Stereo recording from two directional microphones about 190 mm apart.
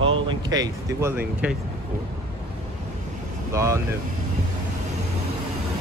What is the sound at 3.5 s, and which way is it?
Speech, 15° right (ahead or behind).